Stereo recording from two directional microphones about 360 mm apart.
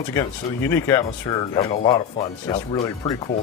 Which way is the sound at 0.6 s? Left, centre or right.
Centre.